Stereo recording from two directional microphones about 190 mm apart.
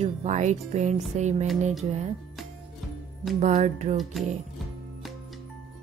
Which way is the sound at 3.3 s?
40° right (ahead or behind).